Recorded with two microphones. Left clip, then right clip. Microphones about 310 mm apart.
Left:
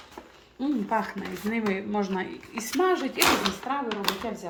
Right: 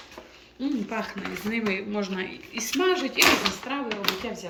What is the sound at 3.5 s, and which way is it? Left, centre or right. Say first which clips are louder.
Speech: even; centre.